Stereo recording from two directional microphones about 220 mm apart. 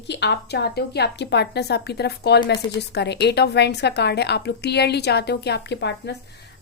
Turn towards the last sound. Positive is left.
turn(degrees=50)  # may be behind; listen again after turning